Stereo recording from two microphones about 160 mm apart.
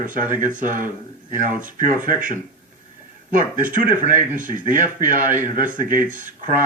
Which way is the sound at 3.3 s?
55° right (ahead or behind).